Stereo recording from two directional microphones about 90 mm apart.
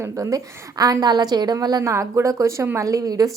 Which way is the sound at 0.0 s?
35° right (ahead or behind).